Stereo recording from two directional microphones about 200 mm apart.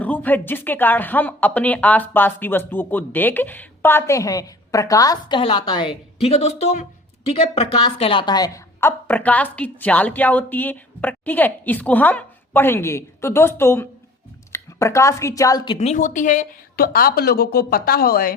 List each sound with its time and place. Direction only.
0.0 s a woman's voice: 10° left (ahead or behind); by 18.3 s 45° left (ahead or behind)